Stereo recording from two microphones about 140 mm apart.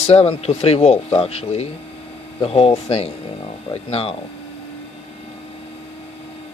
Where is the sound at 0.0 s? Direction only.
50° left (ahead or behind).